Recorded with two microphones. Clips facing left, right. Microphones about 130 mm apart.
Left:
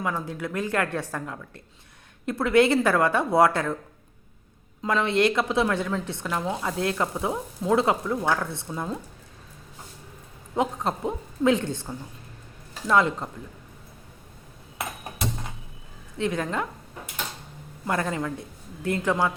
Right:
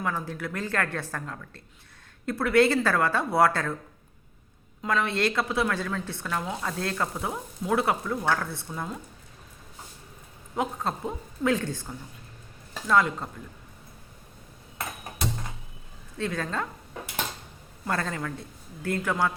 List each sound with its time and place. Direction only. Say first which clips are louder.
0.0 s speech: left 2 dB; 20° left (ahead or behind)
4.8 s speech: left 4 dB; 25° left (ahead or behind)
10.5 s speech: left 3 dB; 20° left (ahead or behind)
12.9 s speech: left 2 dB; 25° left (ahead or behind)
16.1 s speech: left 3 dB; 20° left (ahead or behind)
17.8 s speech: left 3 dB; 20° left (ahead or behind)